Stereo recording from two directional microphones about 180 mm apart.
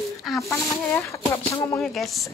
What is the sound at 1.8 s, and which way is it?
Speech, centre (ahead or behind).